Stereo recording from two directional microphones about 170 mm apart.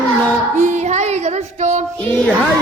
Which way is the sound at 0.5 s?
45° right (ahead or behind).